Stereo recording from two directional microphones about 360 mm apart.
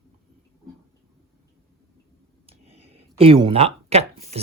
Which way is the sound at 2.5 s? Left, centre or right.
Centre.